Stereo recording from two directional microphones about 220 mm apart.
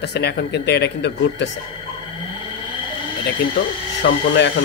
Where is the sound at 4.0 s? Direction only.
50° left (ahead or behind).